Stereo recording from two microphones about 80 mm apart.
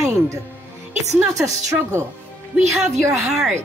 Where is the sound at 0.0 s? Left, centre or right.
Right.